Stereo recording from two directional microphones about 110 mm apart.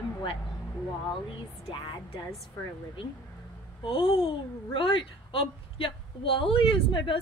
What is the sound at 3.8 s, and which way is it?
A child's voice, 55° left (ahead or behind).